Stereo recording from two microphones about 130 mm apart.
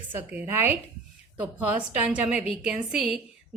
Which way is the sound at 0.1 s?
15° right (ahead or behind).